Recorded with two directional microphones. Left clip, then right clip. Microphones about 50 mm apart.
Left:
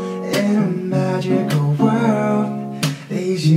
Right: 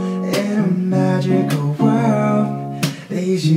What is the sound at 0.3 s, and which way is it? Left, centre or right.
Music, centre.